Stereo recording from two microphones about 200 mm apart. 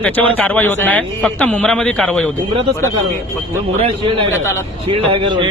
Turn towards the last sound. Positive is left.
turn(degrees=-25)  # may be behind; listen again after turning